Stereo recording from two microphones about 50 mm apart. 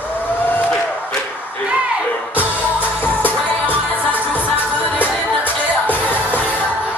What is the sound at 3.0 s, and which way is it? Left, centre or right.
Music, left.